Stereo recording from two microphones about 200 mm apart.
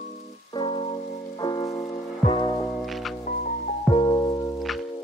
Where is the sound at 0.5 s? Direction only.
25° left (ahead or behind).